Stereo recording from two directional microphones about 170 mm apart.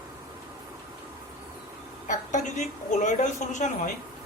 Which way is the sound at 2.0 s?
45° left (ahead or behind).